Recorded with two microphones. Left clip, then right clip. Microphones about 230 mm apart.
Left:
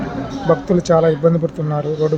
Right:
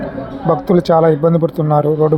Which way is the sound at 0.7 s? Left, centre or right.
Centre.